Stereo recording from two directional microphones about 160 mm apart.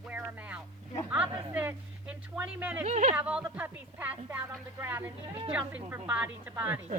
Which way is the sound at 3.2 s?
10° right (ahead or behind).